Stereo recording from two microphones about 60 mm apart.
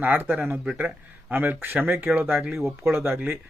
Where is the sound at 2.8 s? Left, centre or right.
Right.